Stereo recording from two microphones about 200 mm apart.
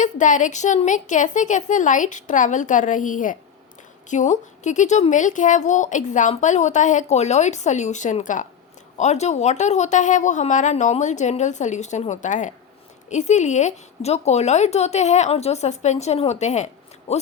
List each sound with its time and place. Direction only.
0.0 s a woman's voice: 40° left (ahead or behind)